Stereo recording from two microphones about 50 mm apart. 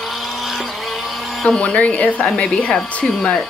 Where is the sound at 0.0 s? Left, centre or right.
Centre.